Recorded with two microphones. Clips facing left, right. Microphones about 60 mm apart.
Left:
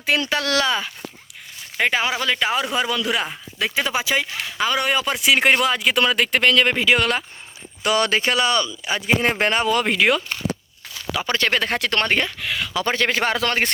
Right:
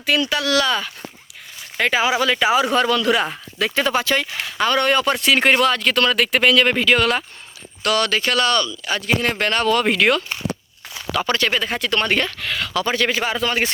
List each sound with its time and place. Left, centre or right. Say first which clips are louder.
0.0 s speech: right 1 dB; left
1.9 s speech: right 6 dB; centre
2.7 s speech: right 5 dB; centre
7.8 s speech: even; centre
9.7 s speech: right 2 dB; centre
11.5 s speech: even; left
12.0 s speech: right 1 dB; left
12.4 s speech: right 1 dB; centre
12.8 s speech: even; left
13.2 s speech: even; left